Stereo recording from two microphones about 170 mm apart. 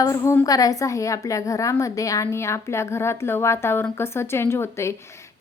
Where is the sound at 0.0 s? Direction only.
20° left (ahead or behind).